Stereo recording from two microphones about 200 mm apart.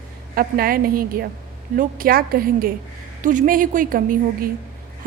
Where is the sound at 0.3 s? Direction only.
50° right (ahead or behind).